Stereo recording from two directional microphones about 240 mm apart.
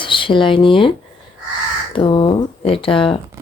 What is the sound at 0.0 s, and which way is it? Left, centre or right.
Speech, left.